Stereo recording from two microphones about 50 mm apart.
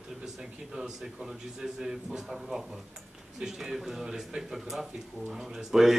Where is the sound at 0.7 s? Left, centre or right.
Centre.